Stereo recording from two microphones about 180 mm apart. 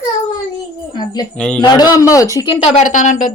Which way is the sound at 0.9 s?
20° left (ahead or behind).